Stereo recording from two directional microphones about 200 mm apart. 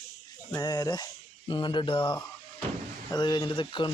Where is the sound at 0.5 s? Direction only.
20° left (ahead or behind).